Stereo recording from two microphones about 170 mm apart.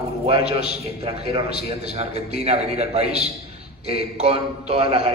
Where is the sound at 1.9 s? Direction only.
40° right (ahead or behind).